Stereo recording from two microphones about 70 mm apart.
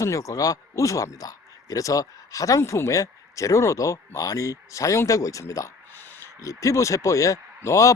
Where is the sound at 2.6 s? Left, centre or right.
Left.